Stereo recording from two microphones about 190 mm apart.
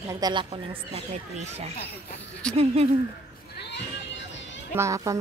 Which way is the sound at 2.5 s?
30° right (ahead or behind).